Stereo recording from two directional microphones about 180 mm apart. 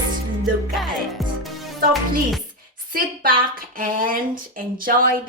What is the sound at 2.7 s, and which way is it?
A woman's voice, 50° right (ahead or behind).